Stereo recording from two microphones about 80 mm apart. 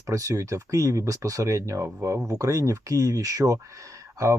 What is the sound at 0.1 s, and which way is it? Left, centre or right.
Speech, right.